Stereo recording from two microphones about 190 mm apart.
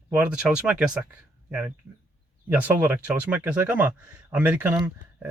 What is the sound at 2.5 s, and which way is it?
Speech, 10° right (ahead or behind).